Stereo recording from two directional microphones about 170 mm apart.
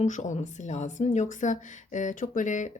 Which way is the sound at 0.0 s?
45° left (ahead or behind).